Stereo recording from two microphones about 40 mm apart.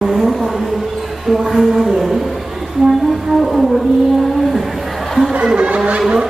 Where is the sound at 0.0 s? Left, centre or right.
Centre.